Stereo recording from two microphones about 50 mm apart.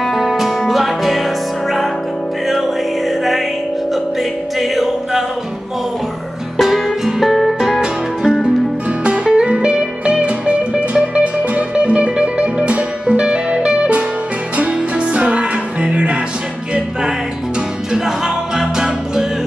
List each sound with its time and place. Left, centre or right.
0.0 s music: centre
3.9 s music: centre
6.5 s music: centre
7.8 s music: centre
17.9 s music: centre